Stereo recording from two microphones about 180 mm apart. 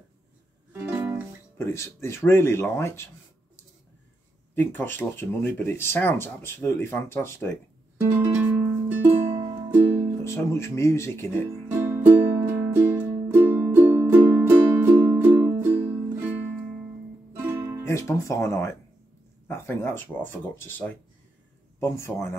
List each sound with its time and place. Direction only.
0.7 s music: 10° right (ahead or behind)
1.6 s speech: 15° left (ahead or behind)
4.6 s speech: 10° left (ahead or behind)
8.0 s music: 10° right (ahead or behind)
10.2 s speech: 15° left (ahead or behind)
11.7 s music: 15° right (ahead or behind)
17.8 s speech: 15° left (ahead or behind)